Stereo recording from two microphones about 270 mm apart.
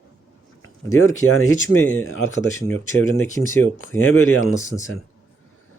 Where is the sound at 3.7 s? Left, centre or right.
Left.